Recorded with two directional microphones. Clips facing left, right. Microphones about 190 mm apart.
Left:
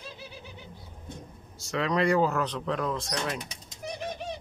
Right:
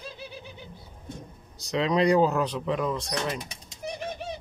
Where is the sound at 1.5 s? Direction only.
20° right (ahead or behind).